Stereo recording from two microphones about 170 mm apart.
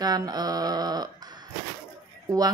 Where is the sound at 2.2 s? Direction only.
20° right (ahead or behind).